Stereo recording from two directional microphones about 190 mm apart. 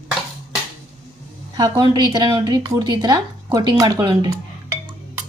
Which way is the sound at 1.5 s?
20° right (ahead or behind).